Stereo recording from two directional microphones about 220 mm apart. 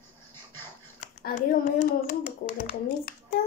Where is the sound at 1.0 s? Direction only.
35° left (ahead or behind).